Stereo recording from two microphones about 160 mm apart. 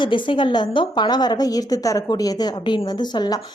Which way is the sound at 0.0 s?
30° left (ahead or behind).